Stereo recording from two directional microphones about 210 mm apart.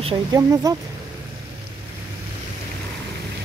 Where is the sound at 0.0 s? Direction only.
20° right (ahead or behind).